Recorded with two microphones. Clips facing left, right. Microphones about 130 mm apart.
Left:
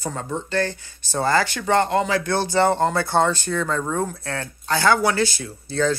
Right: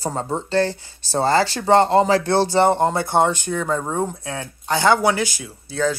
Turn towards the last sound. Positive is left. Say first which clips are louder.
# even
turn(degrees=-10)  # may be behind; listen again after turning